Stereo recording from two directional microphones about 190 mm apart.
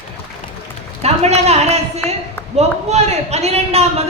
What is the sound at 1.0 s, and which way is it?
A man's voice, 35° right (ahead or behind).